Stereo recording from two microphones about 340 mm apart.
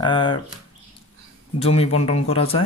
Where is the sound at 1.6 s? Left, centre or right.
Centre.